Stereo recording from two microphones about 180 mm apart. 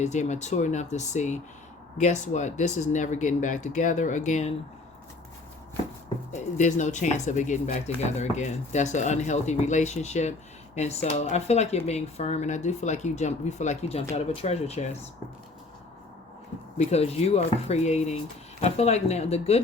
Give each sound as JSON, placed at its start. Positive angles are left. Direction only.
{"t": 0.0, "sound": "speech", "side_deg": 40}
{"t": 6.3, "sound": "speech", "side_deg": 40}
{"t": 16.7, "sound": "speech", "side_deg": 35}